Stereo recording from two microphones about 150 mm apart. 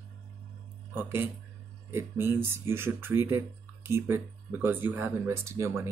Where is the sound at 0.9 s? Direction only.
15° right (ahead or behind).